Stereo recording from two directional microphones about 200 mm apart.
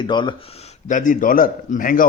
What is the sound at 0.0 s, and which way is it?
A man's voice, 25° left (ahead or behind).